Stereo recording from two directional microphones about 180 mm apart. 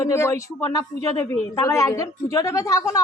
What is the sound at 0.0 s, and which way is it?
A woman's voice, 15° left (ahead or behind).